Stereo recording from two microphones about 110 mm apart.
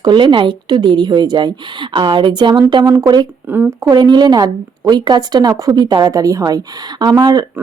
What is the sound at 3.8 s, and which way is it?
Speech, 40° right (ahead or behind).